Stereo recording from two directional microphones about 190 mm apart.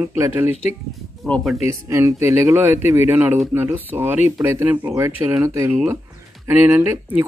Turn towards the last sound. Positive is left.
turn(degrees=-10)  # may be behind; listen again after turning